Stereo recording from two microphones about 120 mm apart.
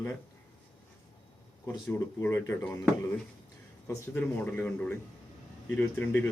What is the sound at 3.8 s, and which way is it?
Speech, 15° left (ahead or behind).